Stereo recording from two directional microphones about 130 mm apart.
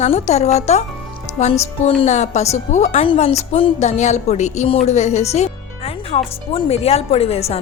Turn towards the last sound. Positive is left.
turn(degrees=50)  # may be behind; listen again after turning